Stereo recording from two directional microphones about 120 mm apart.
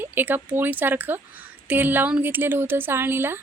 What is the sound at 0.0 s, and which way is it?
Speech, 15° right (ahead or behind).